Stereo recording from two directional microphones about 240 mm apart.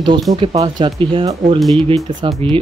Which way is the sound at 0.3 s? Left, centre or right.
Centre.